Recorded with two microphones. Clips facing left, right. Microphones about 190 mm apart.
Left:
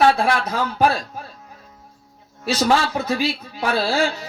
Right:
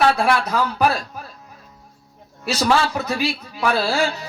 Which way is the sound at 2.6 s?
35° left (ahead or behind).